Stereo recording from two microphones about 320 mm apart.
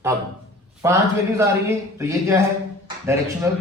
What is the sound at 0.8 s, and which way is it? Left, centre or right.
A man's voice, centre.